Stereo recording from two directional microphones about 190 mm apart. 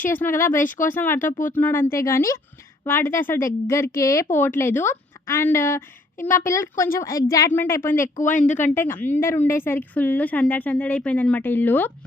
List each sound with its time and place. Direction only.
0.0 s a woman's voice: 10° left (ahead or behind)
8.2 s speech: 40° left (ahead or behind)
8.6 s a woman's voice: 15° left (ahead or behind)